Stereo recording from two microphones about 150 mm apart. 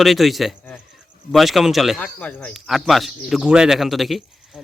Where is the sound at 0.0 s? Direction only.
Centre (ahead or behind).